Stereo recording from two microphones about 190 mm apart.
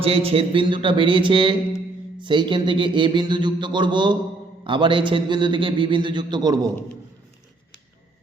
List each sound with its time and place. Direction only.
0.0 s a man's voice: 30° right (ahead or behind)